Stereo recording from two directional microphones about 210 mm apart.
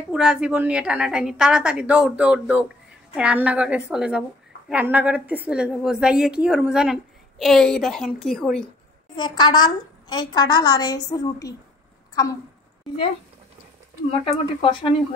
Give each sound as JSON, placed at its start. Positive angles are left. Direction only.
{"t": 0.1, "sound": "a woman's voice", "side_deg": -5}
{"t": 9.1, "sound": "a woman's voice", "side_deg": 20}
{"t": 14.2, "sound": "a woman's voice", "side_deg": 25}